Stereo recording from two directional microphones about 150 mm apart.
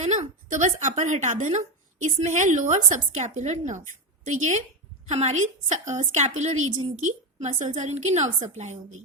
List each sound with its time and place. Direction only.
0.0 s a woman's voice: 50° right (ahead or behind)